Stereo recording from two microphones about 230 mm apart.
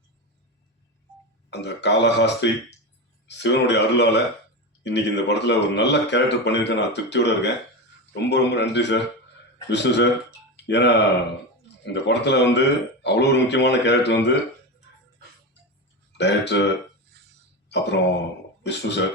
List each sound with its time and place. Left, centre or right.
1.5 s speech: left
16.1 s speech: left
17.7 s speech: left